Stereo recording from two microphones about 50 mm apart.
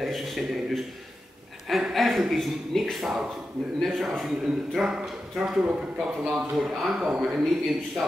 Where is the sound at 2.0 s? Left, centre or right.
Centre.